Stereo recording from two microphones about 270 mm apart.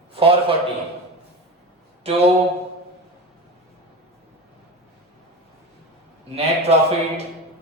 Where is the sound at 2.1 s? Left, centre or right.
Right.